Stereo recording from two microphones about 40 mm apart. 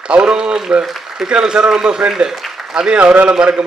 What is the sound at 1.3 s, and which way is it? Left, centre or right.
Speech, right.